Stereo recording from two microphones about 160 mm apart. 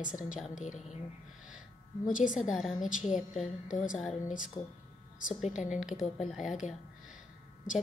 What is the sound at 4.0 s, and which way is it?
Speech, centre (ahead or behind).